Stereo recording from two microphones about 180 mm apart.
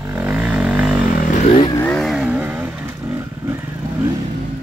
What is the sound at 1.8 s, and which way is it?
Vehicle, 5° left (ahead or behind).